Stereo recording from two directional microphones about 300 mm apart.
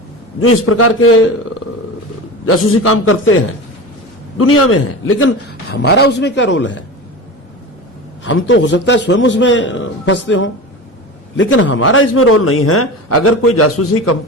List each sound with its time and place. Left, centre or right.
0.3 s a man's voice: left
5.7 s a man's voice: left
8.2 s a man's voice: left